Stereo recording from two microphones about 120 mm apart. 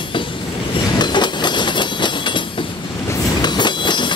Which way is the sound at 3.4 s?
40° left (ahead or behind).